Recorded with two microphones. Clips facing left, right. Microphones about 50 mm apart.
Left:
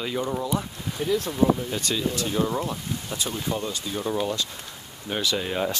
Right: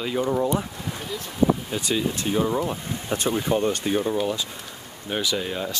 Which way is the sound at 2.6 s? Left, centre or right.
Right.